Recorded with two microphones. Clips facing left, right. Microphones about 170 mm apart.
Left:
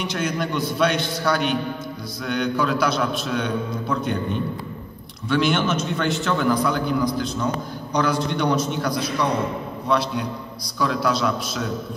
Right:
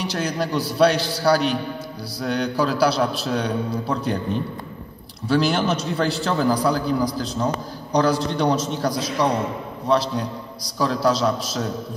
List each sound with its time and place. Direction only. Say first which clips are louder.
0.0 s a man's voice: even; 35° right (ahead or behind)